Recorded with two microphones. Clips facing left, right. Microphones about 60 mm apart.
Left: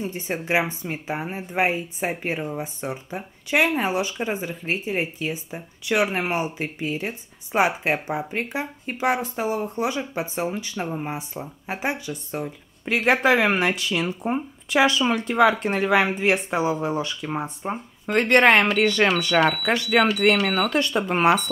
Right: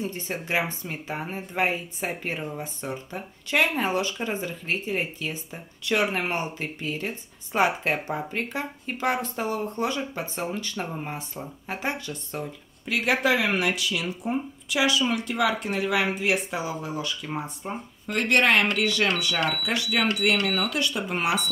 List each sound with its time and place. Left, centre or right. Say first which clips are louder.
0.0 s speech: left 3 dB; centre
12.8 s speech: left 4 dB; left